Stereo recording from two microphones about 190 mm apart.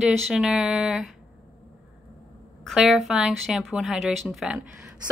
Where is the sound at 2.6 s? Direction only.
Centre (ahead or behind).